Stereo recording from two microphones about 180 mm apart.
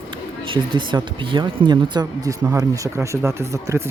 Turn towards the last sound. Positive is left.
turn(degrees=-15)  # may be behind; listen again after turning